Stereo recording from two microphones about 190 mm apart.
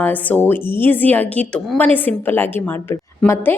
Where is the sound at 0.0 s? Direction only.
10° left (ahead or behind).